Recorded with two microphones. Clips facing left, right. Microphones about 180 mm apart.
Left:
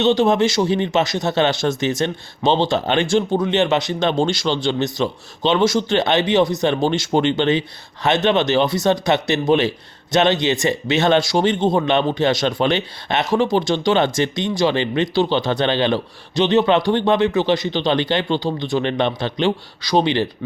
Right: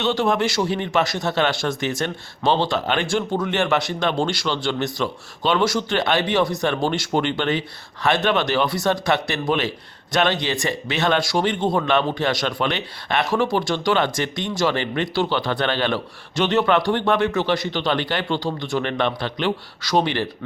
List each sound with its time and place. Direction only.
0.0 s speech: 20° left (ahead or behind)